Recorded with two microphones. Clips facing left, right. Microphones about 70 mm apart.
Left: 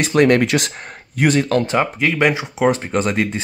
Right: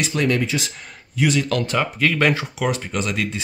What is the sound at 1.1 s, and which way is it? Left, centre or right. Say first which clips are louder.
Speech: left 4 dB; left.